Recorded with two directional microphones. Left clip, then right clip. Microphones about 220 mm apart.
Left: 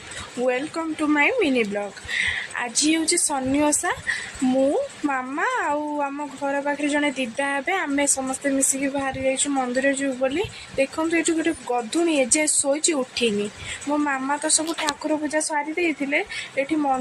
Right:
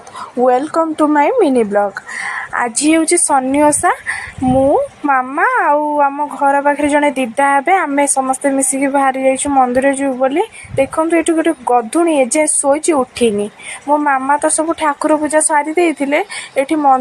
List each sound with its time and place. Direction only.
0.9 s speech: 15° right (ahead or behind)